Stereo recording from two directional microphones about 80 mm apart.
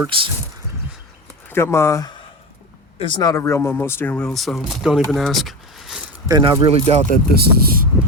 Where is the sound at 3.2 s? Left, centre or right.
Left.